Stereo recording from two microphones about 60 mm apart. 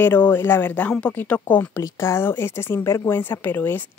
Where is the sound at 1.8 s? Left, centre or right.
Left.